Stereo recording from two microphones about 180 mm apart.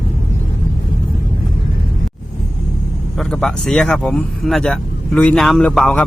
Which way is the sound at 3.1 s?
5° left (ahead or behind).